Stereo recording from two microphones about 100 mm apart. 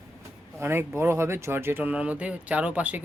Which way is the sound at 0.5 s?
25° right (ahead or behind).